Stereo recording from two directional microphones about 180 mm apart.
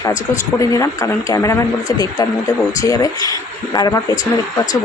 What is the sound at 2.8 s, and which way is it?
Speech, 20° left (ahead or behind).